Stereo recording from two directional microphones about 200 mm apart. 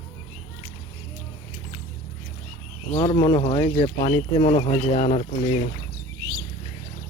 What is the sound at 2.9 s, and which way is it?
Speech, 15° left (ahead or behind).